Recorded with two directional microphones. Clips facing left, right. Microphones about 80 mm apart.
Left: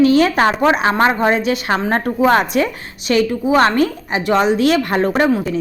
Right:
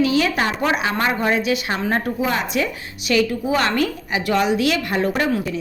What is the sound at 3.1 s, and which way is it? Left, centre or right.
A woman's voice, left.